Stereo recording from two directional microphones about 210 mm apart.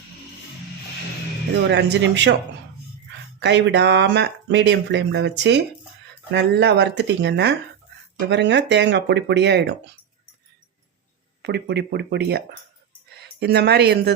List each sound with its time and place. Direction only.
1.6 s speech: 55° right (ahead or behind)
3.4 s speech: 55° right (ahead or behind)
11.4 s speech: 50° right (ahead or behind)
13.4 s speech: 50° right (ahead or behind)